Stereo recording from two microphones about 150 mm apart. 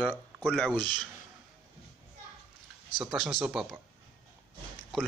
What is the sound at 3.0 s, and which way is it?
Speech, 5° right (ahead or behind).